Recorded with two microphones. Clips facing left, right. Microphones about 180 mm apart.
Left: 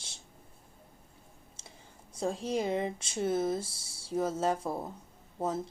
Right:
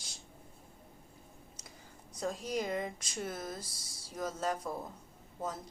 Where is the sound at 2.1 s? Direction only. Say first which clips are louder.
Left 4 dB; 30° left (ahead or behind).